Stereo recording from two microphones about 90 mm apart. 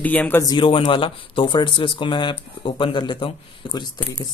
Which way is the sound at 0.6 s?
75° left (ahead or behind).